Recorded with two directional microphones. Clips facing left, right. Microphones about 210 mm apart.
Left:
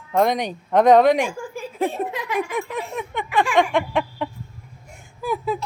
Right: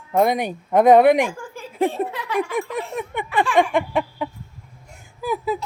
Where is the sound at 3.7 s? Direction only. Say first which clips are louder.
Even; 5° right (ahead or behind).